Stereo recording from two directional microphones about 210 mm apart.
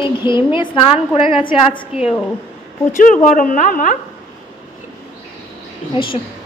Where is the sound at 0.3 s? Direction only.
20° left (ahead or behind).